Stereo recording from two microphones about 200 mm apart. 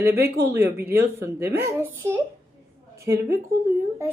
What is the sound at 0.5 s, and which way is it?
A woman's voice, 10° right (ahead or behind).